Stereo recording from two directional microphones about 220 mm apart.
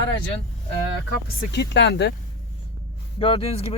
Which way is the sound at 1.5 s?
50° left (ahead or behind).